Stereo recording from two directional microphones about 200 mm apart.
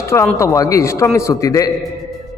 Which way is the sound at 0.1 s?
15° left (ahead or behind).